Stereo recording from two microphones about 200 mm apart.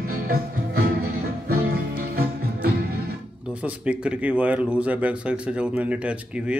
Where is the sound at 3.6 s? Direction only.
5° right (ahead or behind).